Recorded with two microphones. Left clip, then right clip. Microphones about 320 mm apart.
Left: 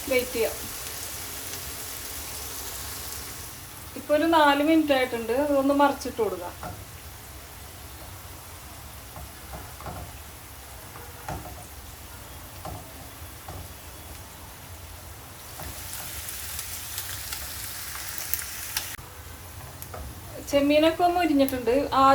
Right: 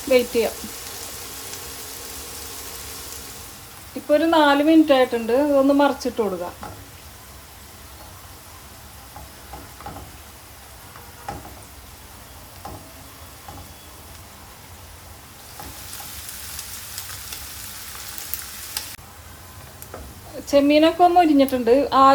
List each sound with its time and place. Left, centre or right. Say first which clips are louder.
0.1 s speech: right 8 dB; right
4.1 s speech: right 4 dB; right
20.5 s speech: right 5 dB; right